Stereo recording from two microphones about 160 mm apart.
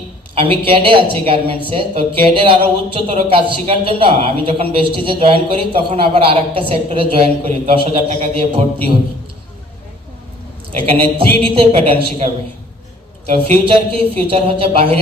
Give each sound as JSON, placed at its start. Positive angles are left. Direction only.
{"t": 0.3, "sound": "speech", "side_deg": -35}
{"t": 10.8, "sound": "speech", "side_deg": -35}
{"t": 13.5, "sound": "speech", "side_deg": -35}